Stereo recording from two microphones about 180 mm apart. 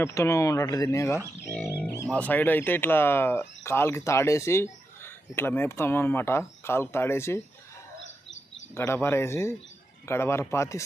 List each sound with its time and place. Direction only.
0.0 s speech: 15° left (ahead or behind)
8.7 s speech: 15° left (ahead or behind)